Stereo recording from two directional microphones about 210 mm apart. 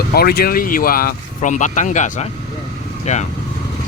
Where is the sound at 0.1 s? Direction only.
50° left (ahead or behind).